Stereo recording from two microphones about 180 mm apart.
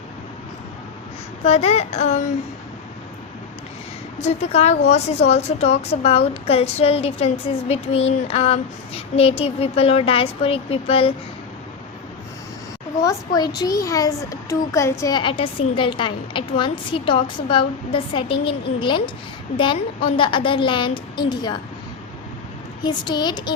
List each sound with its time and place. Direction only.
1.5 s a woman's voice: 35° left (ahead or behind)
4.2 s a woman's voice: 35° left (ahead or behind)
13.0 s a child's voice: 20° left (ahead or behind)
22.8 s a child's voice: 25° left (ahead or behind)